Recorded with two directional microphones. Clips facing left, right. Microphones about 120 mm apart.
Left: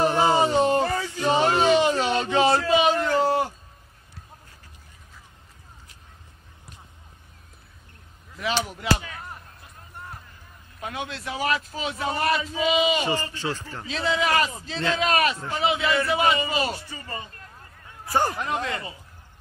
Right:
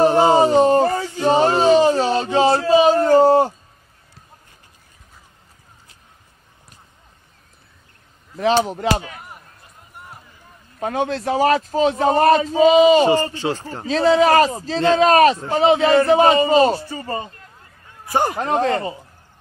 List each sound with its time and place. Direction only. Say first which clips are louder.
0.0 s a sound: right 7 dB; 40° right (ahead or behind)
8.4 s speech: right 10 dB; 35° right (ahead or behind)
9.2 s run: even; 10° right (ahead or behind)
10.8 s speech: right 11 dB; 40° right (ahead or behind)
13.3 s speech: right 7 dB; 65° right (ahead or behind)
13.6 s speech: right 11 dB; 35° right (ahead or behind)
18.0 s a man's voice: right 4 dB; 15° right (ahead or behind)
18.4 s speech: right 9 dB; 40° right (ahead or behind)